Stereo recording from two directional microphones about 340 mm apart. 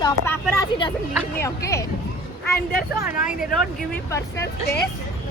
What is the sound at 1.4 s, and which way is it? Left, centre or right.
Speech, centre.